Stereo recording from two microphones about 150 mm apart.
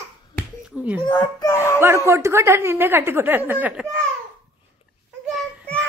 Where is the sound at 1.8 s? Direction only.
20° right (ahead or behind).